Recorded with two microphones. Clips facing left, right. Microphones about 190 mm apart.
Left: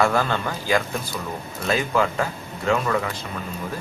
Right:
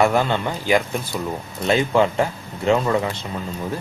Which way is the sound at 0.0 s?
20° right (ahead or behind).